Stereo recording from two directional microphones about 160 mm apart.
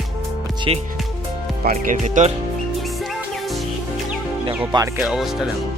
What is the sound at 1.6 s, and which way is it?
Speech, 55° right (ahead or behind).